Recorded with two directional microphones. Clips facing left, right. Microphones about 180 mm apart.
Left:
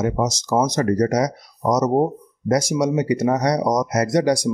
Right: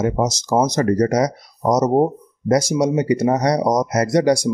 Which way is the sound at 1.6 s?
25° right (ahead or behind).